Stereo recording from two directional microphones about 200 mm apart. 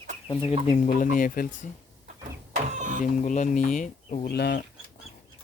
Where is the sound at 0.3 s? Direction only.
25° left (ahead or behind).